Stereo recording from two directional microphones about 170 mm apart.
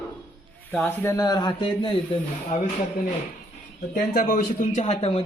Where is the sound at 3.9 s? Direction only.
55° left (ahead or behind); by 5.2 s 35° left (ahead or behind).